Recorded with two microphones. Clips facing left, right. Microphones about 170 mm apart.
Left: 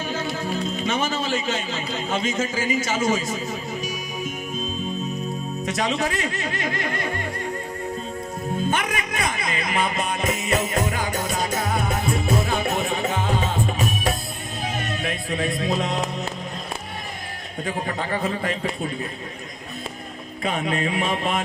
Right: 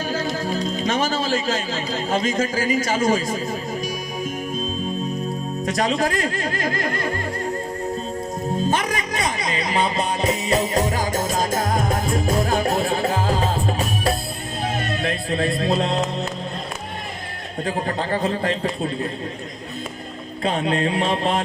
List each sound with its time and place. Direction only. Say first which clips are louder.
0.1 s speech: right 3 dB; 35° right (ahead or behind)
5.6 s speech: right 3 dB; 40° right (ahead or behind)
8.7 s music: right 2 dB; 35° right (ahead or behind)
17.7 s speech: right 3 dB; 30° right (ahead or behind)
20.4 s speech: right 3 dB; 30° right (ahead or behind)